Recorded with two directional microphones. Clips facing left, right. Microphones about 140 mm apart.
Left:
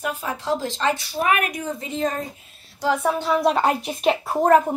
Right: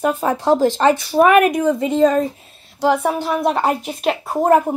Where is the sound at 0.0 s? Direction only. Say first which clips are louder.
Right 9 dB; 45° right (ahead or behind); by 2.2 s 90° right.